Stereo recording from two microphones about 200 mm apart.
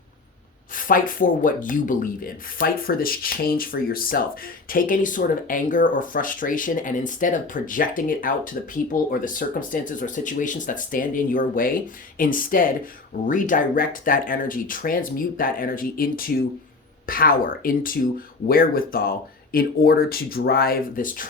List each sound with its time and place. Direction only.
0.9 s speech: 45° left (ahead or behind)